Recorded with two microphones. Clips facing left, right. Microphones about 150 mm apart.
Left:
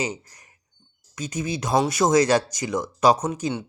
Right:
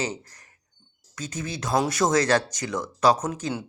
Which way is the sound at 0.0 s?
10° left (ahead or behind).